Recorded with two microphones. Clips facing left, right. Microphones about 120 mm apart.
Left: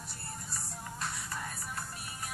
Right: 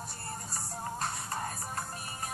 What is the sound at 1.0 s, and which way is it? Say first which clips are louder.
Music: right 1 dB; 45° right (ahead or behind).